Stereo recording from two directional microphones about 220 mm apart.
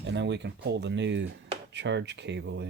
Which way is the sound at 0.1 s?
50° right (ahead or behind).